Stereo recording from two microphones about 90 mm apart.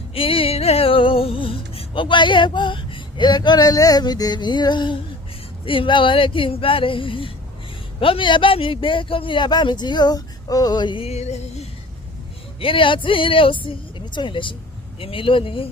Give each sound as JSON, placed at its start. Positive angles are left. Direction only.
{"t": 0.1, "sound": "music", "side_deg": 90}
{"t": 5.6, "sound": "speech", "side_deg": 75}
{"t": 7.9, "sound": "a man's voice", "side_deg": 85}
{"t": 12.5, "sound": "speech", "side_deg": 80}
{"t": 14.9, "sound": "speech", "side_deg": 85}